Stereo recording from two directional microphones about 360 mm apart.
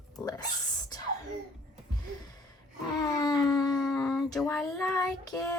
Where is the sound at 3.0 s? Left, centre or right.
Centre.